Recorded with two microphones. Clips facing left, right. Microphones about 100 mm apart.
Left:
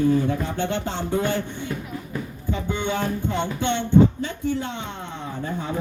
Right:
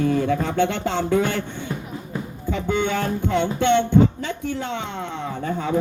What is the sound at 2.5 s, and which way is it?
Music, 70° right (ahead or behind).